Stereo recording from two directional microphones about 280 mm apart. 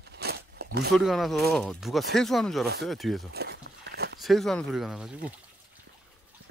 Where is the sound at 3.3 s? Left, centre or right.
Right.